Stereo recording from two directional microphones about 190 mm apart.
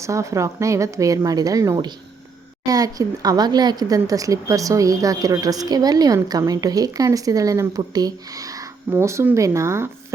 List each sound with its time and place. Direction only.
0.0 s speech: 15° right (ahead or behind)